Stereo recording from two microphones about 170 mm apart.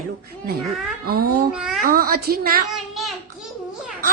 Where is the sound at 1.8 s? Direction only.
60° right (ahead or behind).